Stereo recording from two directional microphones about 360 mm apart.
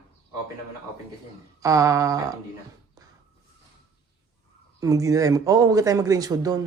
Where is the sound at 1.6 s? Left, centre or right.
Centre.